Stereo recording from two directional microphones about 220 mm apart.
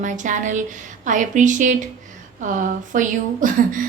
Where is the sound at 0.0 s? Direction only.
35° right (ahead or behind).